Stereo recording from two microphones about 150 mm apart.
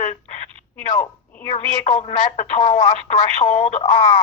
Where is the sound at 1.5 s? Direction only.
45° left (ahead or behind).